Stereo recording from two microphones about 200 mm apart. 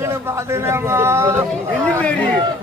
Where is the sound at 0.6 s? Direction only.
15° right (ahead or behind).